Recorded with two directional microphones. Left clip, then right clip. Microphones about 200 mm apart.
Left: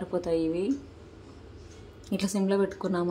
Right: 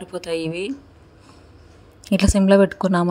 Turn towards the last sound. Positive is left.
turn(degrees=-40)  # may be behind; listen again after turning